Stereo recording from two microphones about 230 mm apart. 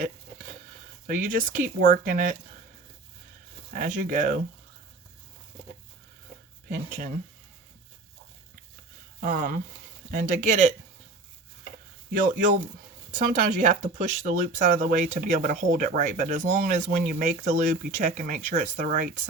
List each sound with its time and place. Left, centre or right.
1.0 s speech: right
3.7 s speech: right
6.7 s speech: right
9.2 s speech: right
12.1 s speech: right